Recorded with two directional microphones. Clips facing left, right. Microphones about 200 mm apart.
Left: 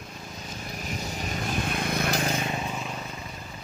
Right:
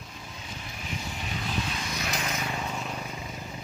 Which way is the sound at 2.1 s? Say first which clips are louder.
Left 4 dB; 30° left (ahead or behind).